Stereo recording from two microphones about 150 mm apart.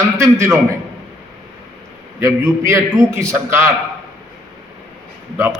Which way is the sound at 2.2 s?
20° right (ahead or behind).